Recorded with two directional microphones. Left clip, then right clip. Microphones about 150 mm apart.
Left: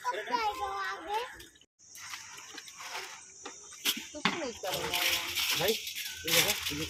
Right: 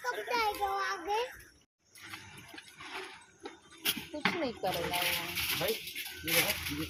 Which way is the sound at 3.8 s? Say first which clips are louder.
Left 1 dB; 55° left (ahead or behind).